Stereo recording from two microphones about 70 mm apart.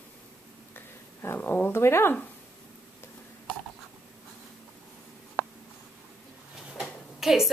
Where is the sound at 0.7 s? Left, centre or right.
Left.